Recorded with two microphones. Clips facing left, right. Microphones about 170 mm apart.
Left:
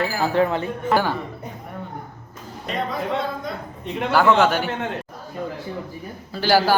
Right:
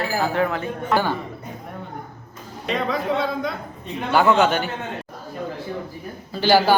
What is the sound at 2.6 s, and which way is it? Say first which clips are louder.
Speech: right 2 dB; 85° right.